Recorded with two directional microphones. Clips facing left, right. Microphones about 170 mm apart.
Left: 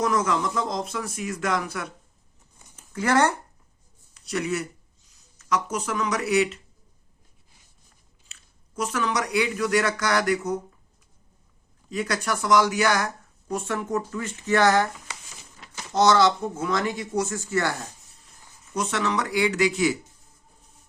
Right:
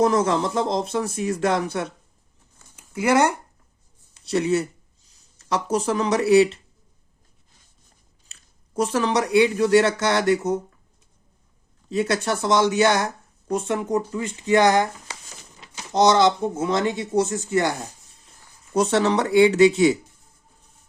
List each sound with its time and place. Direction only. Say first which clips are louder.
0.0 s speech: right 5 dB; 30° right (ahead or behind)
2.7 s speech: right 3 dB; 10° right (ahead or behind)
4.1 s speech: right 6 dB; 30° right (ahead or behind)
8.3 s speech: right 6 dB; 35° right (ahead or behind)
11.9 s speech: right 5 dB; 25° right (ahead or behind)
18.7 s speech: right 7 dB; 30° right (ahead or behind)